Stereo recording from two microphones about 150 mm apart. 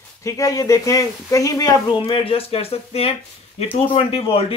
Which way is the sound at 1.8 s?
40° left (ahead or behind).